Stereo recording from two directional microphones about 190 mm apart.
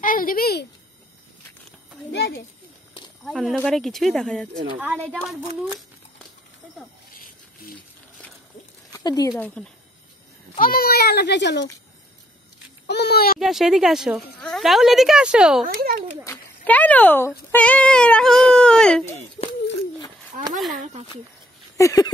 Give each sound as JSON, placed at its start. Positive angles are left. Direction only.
{"t": 0.0, "sound": "speech", "side_deg": 45}
{"t": 3.3, "sound": "speech", "side_deg": 0}
{"t": 8.9, "sound": "speech", "side_deg": 20}
{"t": 9.6, "sound": "speech", "side_deg": 5}
{"t": 10.6, "sound": "a child's voice", "side_deg": 50}
{"t": 12.8, "sound": "a child's voice", "side_deg": 60}
{"t": 13.4, "sound": "speech", "side_deg": 0}
{"t": 15.6, "sound": "a child's voice", "side_deg": -50}
{"t": 16.3, "sound": "a child's voice", "side_deg": 10}
{"t": 19.4, "sound": "speech", "side_deg": 25}
{"t": 20.7, "sound": "speech", "side_deg": -35}
{"t": 21.7, "sound": "speech", "side_deg": 15}